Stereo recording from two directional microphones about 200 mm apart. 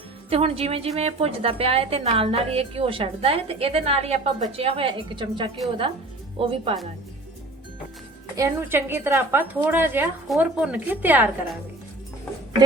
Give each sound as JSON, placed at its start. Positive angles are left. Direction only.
{"t": 0.3, "sound": "a woman's voice", "side_deg": -30}
{"t": 8.4, "sound": "a woman's voice", "side_deg": -15}